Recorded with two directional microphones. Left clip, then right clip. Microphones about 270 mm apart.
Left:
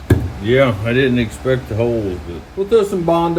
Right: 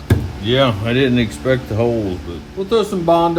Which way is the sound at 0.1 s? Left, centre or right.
Centre.